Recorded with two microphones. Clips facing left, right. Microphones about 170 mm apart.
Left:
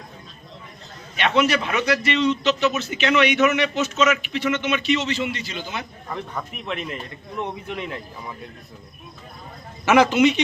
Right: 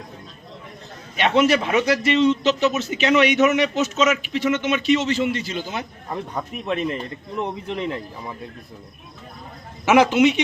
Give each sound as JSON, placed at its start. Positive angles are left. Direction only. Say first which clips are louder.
{"t": 1.2, "sound": "a man's voice", "louder": "right 3 dB", "side_deg": -45}
{"t": 1.5, "sound": "a man's voice", "louder": "right 3 dB", "side_deg": -30}
{"t": 6.1, "sound": "a man's voice", "louder": "right 2 dB", "side_deg": -25}
{"t": 9.8, "sound": "speech", "louder": "right 1 dB", "side_deg": -5}